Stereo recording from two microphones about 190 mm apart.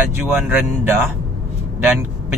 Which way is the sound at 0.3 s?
10° right (ahead or behind).